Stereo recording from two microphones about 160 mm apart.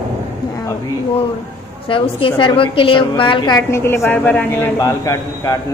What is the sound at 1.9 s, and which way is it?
A woman's voice, 35° left (ahead or behind).